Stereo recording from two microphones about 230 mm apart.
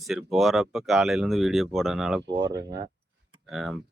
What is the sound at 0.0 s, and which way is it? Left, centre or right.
Speech, centre.